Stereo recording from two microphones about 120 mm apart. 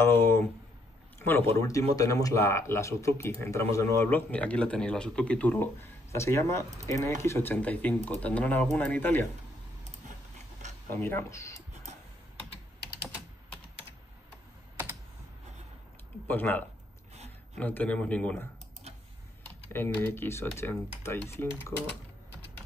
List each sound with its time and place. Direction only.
0.0 s speech: 20° left (ahead or behind)
1.5 s speech: 25° left (ahead or behind); by 5.7 s 10° left (ahead or behind)
6.1 s speech: 25° left (ahead or behind)
10.9 s speech: 20° left (ahead or behind)
11.5 s a sound: 65° right (ahead or behind)
16.3 s speech: 15° left (ahead or behind)
18.9 s typing: 60° right (ahead or behind)
19.4 s speech: 20° left (ahead or behind)